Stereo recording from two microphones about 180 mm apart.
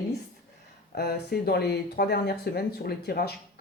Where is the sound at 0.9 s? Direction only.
65° left (ahead or behind).